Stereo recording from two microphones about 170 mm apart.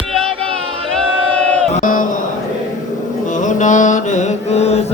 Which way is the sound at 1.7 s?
50° left (ahead or behind).